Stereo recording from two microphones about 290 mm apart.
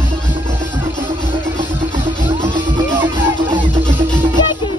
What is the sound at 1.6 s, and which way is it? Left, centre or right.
Music, right.